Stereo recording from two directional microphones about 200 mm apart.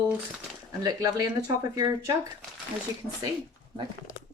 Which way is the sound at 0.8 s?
20° right (ahead or behind).